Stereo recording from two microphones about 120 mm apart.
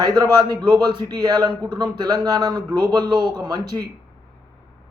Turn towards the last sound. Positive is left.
turn(degrees=-35)  # may be behind; listen again after turning